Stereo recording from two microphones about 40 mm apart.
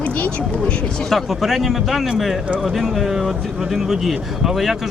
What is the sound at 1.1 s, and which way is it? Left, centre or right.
Speech, centre.